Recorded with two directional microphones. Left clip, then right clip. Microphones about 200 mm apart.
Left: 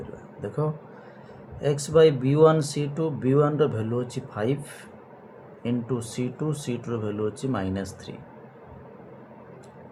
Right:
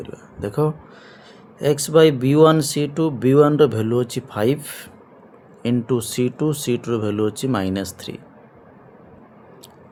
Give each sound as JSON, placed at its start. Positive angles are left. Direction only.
{"t": 0.4, "sound": "speech", "side_deg": -45}